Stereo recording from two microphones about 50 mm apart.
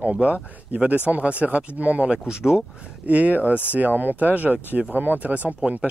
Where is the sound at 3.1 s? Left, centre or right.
Right.